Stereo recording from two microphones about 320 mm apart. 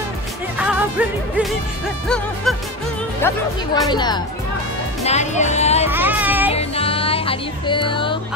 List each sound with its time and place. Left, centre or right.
0.6 s music: centre
3.2 s speech: centre
5.9 s music: centre
6.5 s music: centre